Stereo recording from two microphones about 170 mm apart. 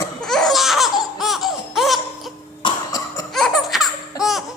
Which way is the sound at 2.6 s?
25° left (ahead or behind).